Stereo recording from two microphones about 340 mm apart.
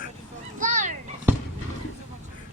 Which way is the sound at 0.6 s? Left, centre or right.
Right.